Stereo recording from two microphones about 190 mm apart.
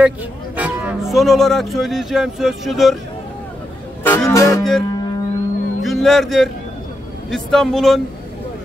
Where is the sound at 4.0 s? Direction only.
10° left (ahead or behind).